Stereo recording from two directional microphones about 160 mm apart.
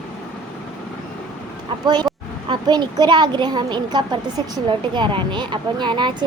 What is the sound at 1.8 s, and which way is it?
Speech, 25° right (ahead or behind).